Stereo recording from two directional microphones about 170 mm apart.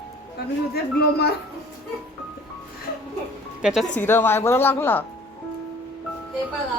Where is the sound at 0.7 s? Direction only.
70° left (ahead or behind).